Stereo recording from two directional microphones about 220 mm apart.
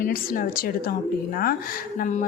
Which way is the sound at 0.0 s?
40° left (ahead or behind).